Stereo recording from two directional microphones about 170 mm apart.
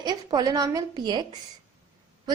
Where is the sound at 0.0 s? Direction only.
25° right (ahead or behind).